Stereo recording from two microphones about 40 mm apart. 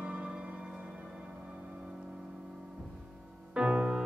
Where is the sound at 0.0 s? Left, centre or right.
Right.